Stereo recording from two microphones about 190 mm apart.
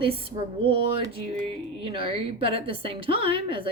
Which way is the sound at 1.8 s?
25° right (ahead or behind).